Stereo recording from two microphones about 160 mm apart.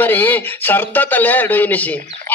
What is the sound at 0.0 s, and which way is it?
A man's voice, 10° left (ahead or behind).